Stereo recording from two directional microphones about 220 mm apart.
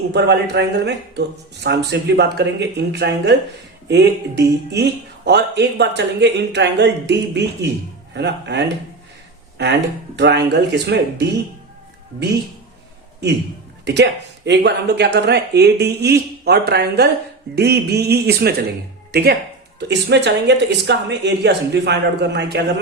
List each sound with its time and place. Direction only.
0.1 s speech: 50° right (ahead or behind)
10.2 s speech: 50° right (ahead or behind)
13.8 s speech: 50° right (ahead or behind)